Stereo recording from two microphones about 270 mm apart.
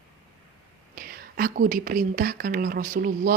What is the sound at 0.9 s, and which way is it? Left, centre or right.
Speech, right.